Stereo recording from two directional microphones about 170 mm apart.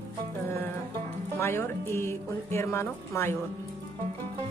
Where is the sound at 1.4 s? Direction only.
15° left (ahead or behind).